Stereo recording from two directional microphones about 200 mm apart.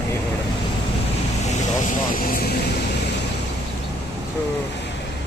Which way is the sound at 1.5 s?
40° left (ahead or behind).